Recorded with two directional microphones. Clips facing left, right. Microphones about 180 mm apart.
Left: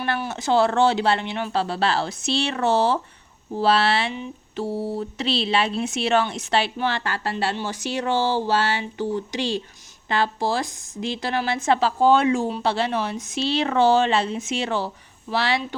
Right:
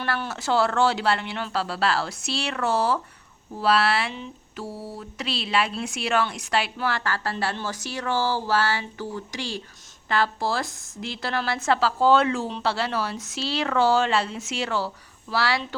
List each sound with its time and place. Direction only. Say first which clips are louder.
0.0 s a woman's voice: left 3 dB; 20° left (ahead or behind)